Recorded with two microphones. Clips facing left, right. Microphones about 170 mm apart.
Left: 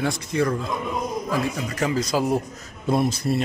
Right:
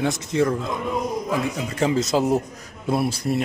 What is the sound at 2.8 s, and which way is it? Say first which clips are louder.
Speech: left 1 dB; 5° right (ahead or behind).